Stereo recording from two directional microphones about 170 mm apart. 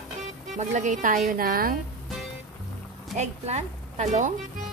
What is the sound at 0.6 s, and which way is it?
Speech, 45° right (ahead or behind).